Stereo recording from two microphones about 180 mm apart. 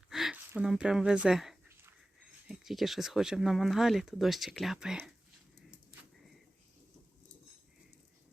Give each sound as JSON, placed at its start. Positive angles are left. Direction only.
{"t": 0.1, "sound": "speech", "side_deg": 0}